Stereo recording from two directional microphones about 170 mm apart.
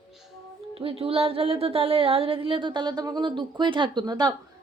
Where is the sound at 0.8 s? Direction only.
35° right (ahead or behind).